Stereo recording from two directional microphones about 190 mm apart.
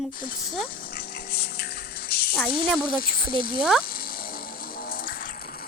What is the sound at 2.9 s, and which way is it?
Speech, 50° left (ahead or behind).